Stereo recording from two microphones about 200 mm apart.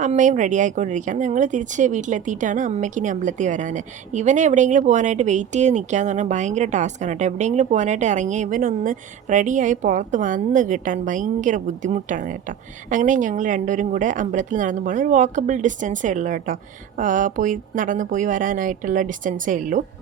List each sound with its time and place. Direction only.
0.0 s speech: 40° right (ahead or behind)